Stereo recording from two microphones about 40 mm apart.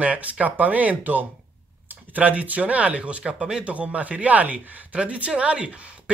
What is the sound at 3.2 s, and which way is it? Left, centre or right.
Speech, centre.